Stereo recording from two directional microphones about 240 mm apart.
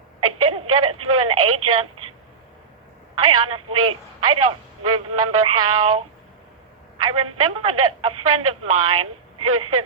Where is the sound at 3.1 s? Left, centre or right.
Right.